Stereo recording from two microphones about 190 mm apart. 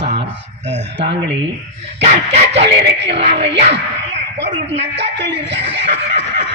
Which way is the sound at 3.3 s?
65° right (ahead or behind).